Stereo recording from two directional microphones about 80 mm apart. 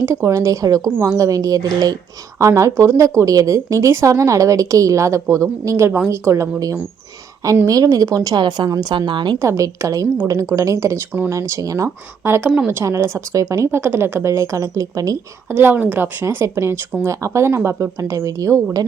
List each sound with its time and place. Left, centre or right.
0.3 s speech: right
2.4 s speech: right
8.4 s a woman's voice: right
9.0 s a woman's voice: right
9.4 s speech: right
12.2 s speech: right
13.7 s speech: right
15.4 s a woman's voice: right
16.2 s speech: right